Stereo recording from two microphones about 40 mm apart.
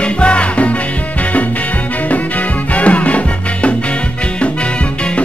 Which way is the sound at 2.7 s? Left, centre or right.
Left.